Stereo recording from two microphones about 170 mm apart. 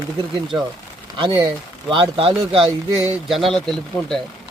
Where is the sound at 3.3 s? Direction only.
Centre (ahead or behind).